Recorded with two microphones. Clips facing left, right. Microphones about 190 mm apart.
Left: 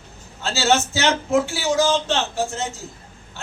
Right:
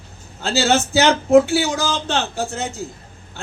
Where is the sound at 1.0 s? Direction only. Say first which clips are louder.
Right 7 dB; 55° right (ahead or behind).